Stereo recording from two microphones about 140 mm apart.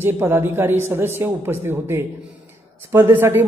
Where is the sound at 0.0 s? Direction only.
15° right (ahead or behind).